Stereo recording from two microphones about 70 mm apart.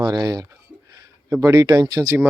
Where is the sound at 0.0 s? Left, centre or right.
Right.